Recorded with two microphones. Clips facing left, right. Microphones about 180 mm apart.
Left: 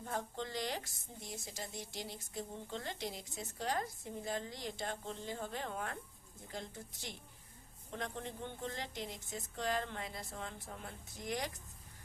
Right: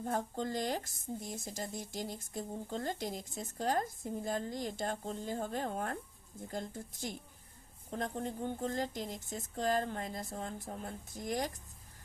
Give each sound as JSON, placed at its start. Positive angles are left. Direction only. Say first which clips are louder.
{"t": 0.0, "sound": "a woman's voice", "louder": "right 5 dB", "side_deg": -45}